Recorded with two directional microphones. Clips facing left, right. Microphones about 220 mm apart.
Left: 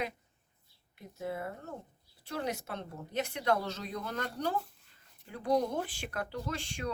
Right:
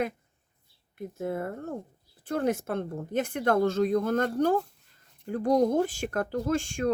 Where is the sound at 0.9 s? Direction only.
50° right (ahead or behind).